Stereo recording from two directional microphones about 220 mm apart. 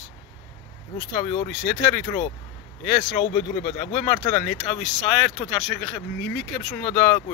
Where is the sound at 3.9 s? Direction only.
25° left (ahead or behind).